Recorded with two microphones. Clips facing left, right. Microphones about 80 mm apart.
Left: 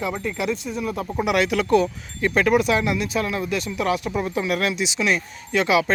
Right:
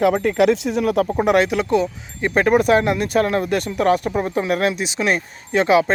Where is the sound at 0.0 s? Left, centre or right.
Right.